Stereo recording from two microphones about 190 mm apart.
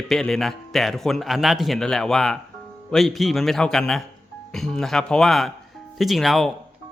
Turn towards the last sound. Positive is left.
turn(degrees=0)  # may be behind; listen again after turning